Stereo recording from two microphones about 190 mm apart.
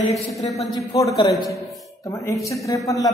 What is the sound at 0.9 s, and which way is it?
A man's voice, 20° left (ahead or behind).